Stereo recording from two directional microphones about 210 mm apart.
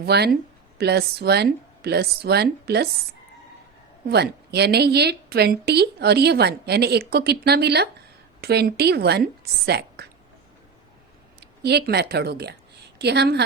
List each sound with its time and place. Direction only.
0.0 s a woman's voice: 50° right (ahead or behind)
4.1 s a woman's voice: 50° right (ahead or behind)
11.3 s a woman's voice: 50° right (ahead or behind)